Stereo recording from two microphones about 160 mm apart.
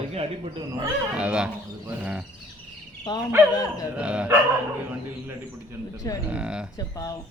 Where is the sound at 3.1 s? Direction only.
25° left (ahead or behind).